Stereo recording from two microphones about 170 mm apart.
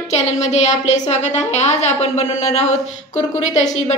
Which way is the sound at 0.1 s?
40° left (ahead or behind).